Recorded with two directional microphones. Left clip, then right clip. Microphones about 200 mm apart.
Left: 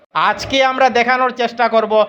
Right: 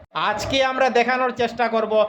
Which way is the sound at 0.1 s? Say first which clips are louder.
Left 6 dB; 15° left (ahead or behind).